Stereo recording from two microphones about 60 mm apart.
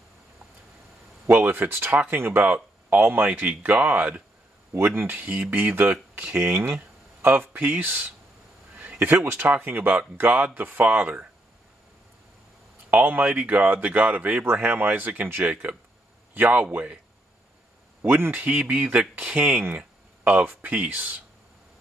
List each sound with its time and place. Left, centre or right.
1.4 s speech: right
2.4 s a sound: right
3.0 s speech: right
3.3 s speech: right
4.8 s speech: right
12.9 s speech: right
14.4 s speech: right
18.0 s speech: right
18.5 s speech: right